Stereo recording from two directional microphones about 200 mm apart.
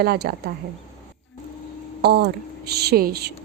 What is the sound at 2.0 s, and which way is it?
A woman's voice, 55° right (ahead or behind).